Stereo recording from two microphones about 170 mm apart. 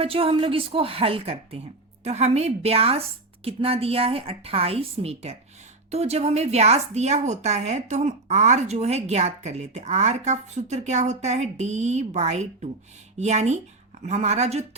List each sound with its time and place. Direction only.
0.0 s a woman's voice: 35° right (ahead or behind)